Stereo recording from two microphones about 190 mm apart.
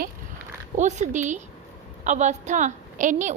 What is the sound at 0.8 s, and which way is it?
A woman's voice, 40° right (ahead or behind).